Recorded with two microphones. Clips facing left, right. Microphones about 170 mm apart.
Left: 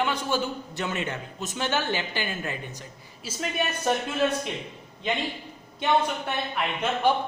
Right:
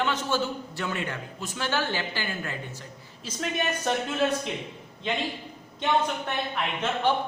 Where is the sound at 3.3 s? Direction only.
10° left (ahead or behind).